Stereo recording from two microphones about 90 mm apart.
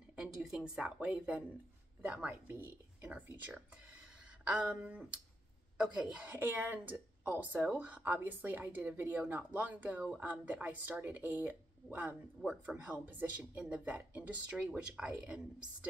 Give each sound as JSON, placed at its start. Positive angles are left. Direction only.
{"t": 0.1, "sound": "a woman's voice", "side_deg": -5}